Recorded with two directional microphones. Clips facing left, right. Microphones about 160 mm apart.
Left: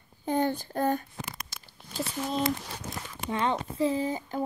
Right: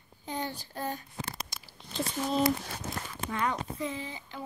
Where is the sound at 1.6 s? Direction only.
Centre (ahead or behind).